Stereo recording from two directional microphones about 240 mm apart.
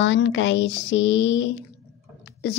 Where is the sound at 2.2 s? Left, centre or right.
Left.